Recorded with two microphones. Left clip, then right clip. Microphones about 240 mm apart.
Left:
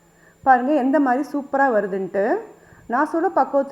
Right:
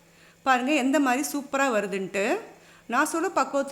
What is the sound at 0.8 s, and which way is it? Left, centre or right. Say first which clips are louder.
Speech: left 5 dB; centre.